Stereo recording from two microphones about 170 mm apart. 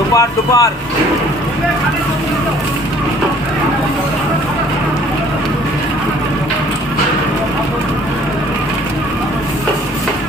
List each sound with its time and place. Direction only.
0.2 s speech: 20° left (ahead or behind)